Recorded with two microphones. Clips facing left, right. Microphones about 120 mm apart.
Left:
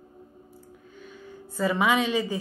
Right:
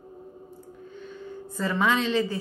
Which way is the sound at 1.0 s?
10° left (ahead or behind).